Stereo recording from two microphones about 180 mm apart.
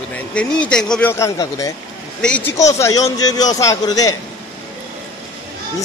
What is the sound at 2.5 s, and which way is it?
A man's voice, 20° left (ahead or behind).